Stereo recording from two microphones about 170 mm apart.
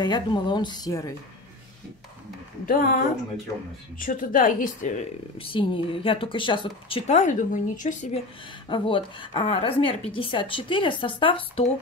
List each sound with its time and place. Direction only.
0.0 s a woman's voice: 25° left (ahead or behind)
2.6 s speech: 50° left (ahead or behind)
4.0 s speech: 50° left (ahead or behind)
5.4 s a woman's voice: 30° left (ahead or behind); by 8.2 s 45° left (ahead or behind)
8.6 s a woman's voice: 30° left (ahead or behind)